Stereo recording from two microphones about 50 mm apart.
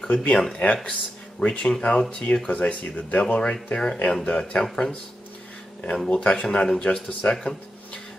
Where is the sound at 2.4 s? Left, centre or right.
Left.